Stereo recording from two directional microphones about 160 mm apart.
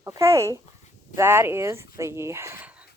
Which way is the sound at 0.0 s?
20° right (ahead or behind).